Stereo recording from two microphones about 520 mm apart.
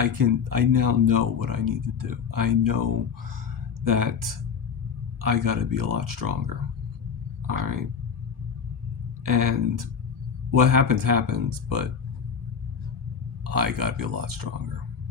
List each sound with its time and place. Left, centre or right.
0.0 s speech: right
9.2 s speech: right
13.4 s speech: right